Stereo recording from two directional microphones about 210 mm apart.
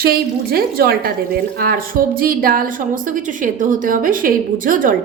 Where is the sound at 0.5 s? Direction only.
45° right (ahead or behind).